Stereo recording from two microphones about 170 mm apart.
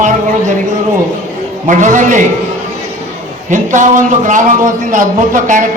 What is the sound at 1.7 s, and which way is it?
Speech, 45° right (ahead or behind).